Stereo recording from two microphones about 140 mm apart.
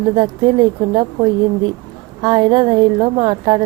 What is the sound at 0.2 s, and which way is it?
A woman's voice, 30° right (ahead or behind).